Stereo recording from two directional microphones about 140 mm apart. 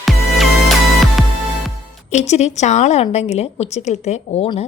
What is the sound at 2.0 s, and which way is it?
Speech, 55° left (ahead or behind).